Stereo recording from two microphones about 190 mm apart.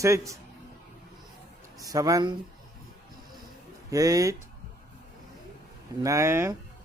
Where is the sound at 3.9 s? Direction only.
20° right (ahead or behind).